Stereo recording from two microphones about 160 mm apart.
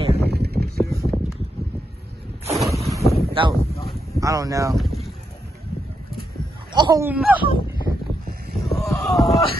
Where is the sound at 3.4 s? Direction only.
35° right (ahead or behind).